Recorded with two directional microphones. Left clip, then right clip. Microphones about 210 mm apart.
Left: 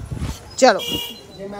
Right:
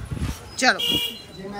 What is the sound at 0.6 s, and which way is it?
Speech, 35° left (ahead or behind).